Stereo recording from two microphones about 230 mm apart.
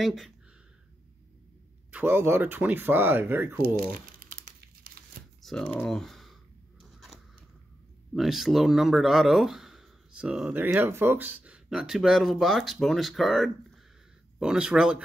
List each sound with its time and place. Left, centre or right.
0.0 s speech: centre
1.9 s speech: centre
3.6 s crumpling: right
5.4 s speech: centre
6.8 s a sound: centre
8.1 s speech: centre